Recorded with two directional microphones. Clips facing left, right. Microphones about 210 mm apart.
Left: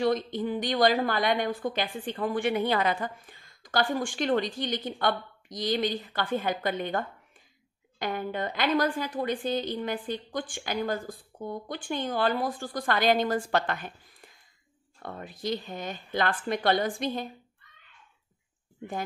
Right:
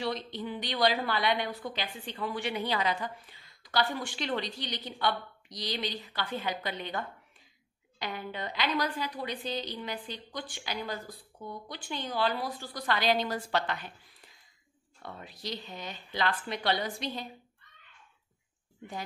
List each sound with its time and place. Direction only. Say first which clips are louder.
0.0 s a woman's voice: left 8 dB; 50° left (ahead or behind)